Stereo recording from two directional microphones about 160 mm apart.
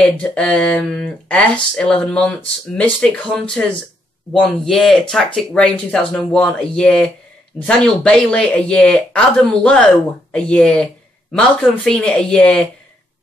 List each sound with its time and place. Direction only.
0.0 s speech: 5° left (ahead or behind)